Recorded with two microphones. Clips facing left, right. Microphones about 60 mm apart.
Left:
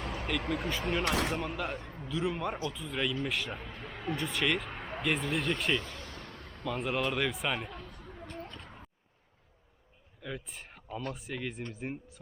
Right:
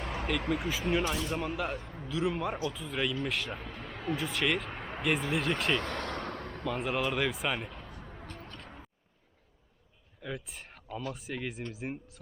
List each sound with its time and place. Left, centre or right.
0.0 s a sound: right
0.3 s speech: centre
1.0 s speech: left
1.4 s speech: centre
5.8 s vehicle: right
6.7 s speech: centre
10.2 s speech: centre